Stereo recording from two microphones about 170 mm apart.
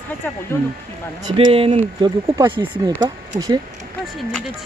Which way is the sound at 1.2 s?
30° right (ahead or behind).